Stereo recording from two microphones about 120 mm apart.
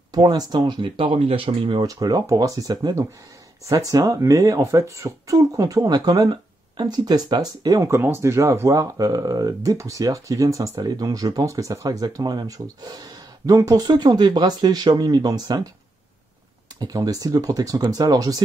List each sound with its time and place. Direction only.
0.1 s speech: 35° right (ahead or behind)
1.9 s speech: 30° right (ahead or behind)
7.8 s speech: 20° right (ahead or behind)
16.8 s speech: 30° right (ahead or behind)